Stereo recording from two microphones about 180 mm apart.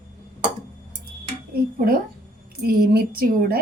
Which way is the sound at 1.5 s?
55° right (ahead or behind).